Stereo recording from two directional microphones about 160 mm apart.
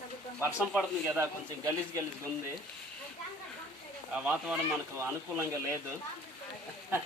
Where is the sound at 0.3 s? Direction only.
10° right (ahead or behind).